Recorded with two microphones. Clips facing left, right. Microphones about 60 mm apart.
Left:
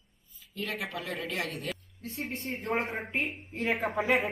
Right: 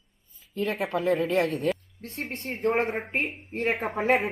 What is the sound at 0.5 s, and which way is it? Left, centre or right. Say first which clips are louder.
A woman's voice: right 8 dB; right.